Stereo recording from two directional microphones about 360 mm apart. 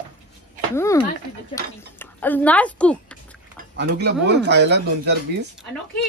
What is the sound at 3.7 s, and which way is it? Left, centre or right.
Speech, right.